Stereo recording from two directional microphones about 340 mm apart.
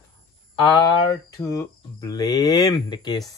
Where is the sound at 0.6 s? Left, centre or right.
Centre.